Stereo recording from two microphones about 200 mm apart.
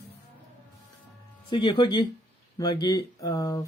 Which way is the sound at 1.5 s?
25° left (ahead or behind).